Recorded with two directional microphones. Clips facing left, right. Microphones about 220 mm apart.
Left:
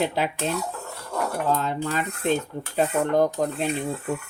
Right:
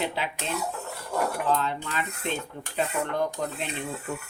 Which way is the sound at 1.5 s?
45° left (ahead or behind).